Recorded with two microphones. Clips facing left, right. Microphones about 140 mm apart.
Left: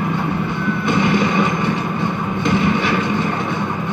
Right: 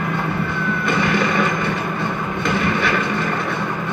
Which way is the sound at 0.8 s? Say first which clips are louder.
Left 3 dB; 15° left (ahead or behind).